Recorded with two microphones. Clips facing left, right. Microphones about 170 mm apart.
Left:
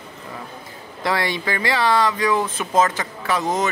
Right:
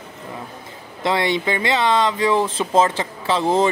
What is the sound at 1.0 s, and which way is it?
Speech, 20° right (ahead or behind).